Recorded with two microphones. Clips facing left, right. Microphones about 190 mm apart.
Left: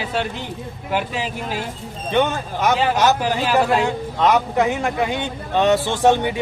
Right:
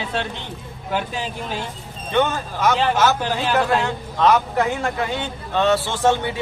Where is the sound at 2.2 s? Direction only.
15° left (ahead or behind).